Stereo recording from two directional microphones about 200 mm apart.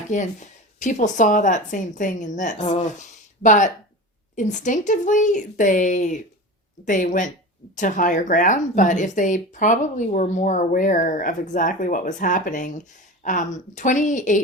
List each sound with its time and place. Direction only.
0.1 s a woman's voice: 40° left (ahead or behind)